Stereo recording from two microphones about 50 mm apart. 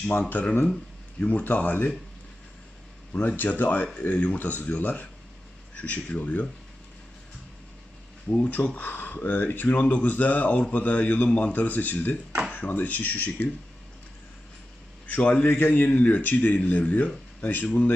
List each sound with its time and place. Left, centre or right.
0.2 s speech: left
3.1 s speech: left
8.5 s speech: left
9.8 s speech: left
15.0 s speech: left